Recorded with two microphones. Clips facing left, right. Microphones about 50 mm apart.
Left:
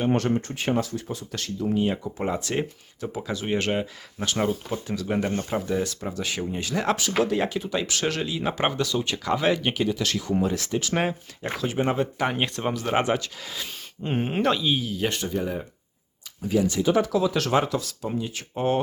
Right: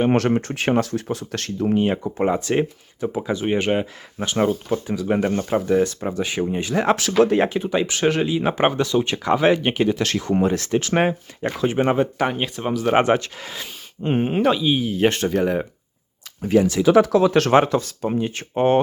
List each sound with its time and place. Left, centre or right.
0.1 s speech: right
2.1 s speech: right
9.9 s speech: right
11.6 s speech: right
12.3 s speech: centre
13.0 s speech: right
14.1 s speech: centre
14.7 s speech: right
14.9 s speech: right
15.2 s speech: right
16.4 s speech: right
16.6 s speech: right